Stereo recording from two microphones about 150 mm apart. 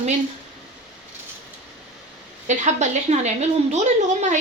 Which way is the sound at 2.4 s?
50° right (ahead or behind).